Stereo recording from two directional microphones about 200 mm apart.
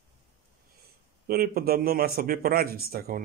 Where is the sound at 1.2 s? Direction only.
50° right (ahead or behind).